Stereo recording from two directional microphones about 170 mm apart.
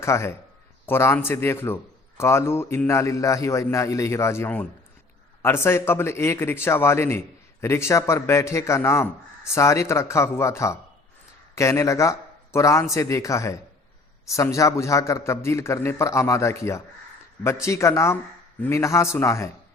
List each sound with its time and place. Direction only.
0.0 s a man's voice: 15° left (ahead or behind)